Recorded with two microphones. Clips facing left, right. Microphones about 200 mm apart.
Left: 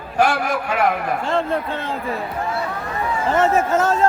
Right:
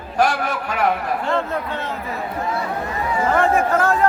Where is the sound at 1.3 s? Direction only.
30° left (ahead or behind).